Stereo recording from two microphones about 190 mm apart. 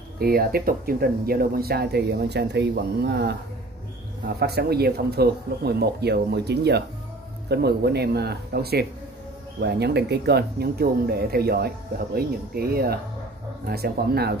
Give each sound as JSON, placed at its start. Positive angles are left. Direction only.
{"t": 0.2, "sound": "speech", "side_deg": -50}
{"t": 4.4, "sound": "speech", "side_deg": -55}